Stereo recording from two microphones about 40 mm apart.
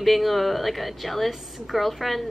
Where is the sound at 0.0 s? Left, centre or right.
Centre.